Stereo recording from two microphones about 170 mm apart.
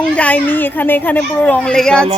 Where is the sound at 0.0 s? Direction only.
10° left (ahead or behind).